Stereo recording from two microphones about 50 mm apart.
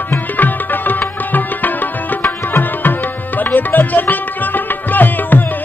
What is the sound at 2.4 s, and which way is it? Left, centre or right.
Music, left.